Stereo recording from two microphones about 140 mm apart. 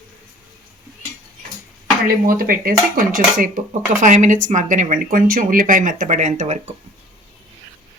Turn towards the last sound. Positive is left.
turn(degrees=-55)  # may be behind; listen again after turning